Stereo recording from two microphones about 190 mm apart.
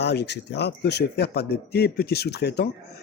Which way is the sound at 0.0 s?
60° left (ahead or behind).